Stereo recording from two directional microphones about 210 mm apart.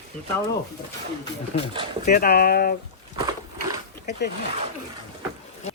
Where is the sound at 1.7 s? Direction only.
25° right (ahead or behind).